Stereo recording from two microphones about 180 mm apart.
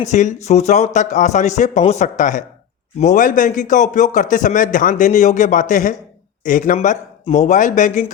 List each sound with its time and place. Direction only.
0.0 s speech: 40° left (ahead or behind)